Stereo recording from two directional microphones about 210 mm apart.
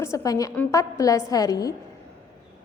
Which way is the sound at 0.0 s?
15° left (ahead or behind).